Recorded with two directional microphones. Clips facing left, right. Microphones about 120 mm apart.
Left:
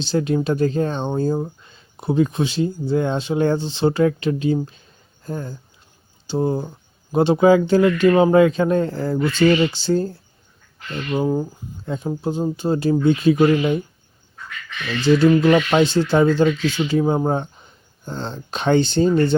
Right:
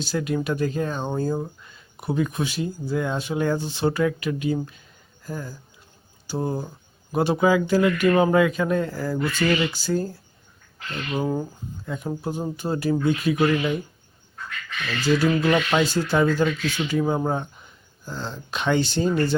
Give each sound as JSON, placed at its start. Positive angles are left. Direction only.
{"t": 0.0, "sound": "speech", "side_deg": 30}
{"t": 11.1, "sound": "speech", "side_deg": 15}
{"t": 15.3, "sound": "speech", "side_deg": 15}